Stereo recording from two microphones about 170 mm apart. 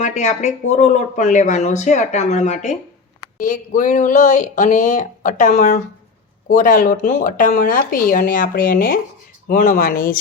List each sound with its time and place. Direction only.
0.0 s speech: 45° left (ahead or behind); by 10.2 s 60° left (ahead or behind)